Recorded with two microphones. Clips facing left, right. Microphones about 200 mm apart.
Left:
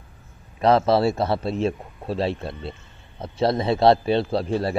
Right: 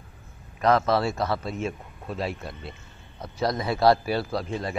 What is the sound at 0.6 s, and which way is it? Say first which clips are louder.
A man's voice: left 4 dB; 30° left (ahead or behind).